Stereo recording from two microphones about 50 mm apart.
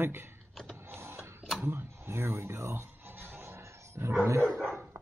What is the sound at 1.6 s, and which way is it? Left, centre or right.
Music, right.